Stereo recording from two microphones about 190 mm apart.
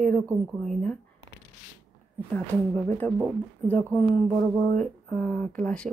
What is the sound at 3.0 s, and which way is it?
Speech, 10° left (ahead or behind).